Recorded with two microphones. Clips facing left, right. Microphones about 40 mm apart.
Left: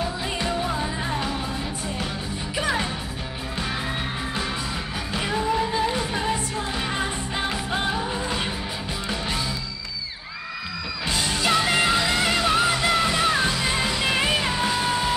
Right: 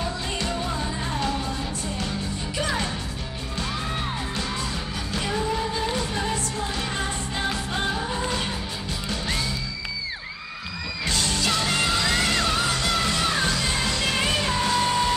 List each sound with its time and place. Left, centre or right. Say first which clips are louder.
0.0 s music: left 2 dB; centre
2.5 s music: left 2 dB; centre
5.9 s music: left 2 dB; centre
11.1 s music: left 2 dB; centre